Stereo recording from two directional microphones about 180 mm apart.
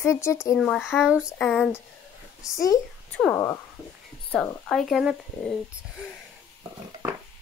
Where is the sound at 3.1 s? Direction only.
5° left (ahead or behind).